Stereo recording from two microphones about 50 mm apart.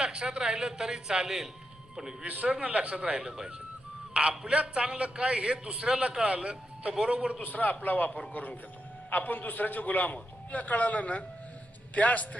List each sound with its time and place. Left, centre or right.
0.0 s speech: centre
2.2 s a man's voice: right
7.4 s a man's voice: left